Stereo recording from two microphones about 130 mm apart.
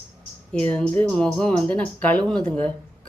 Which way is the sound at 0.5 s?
10° left (ahead or behind).